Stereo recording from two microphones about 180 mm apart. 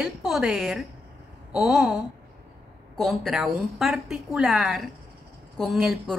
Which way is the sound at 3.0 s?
Centre (ahead or behind).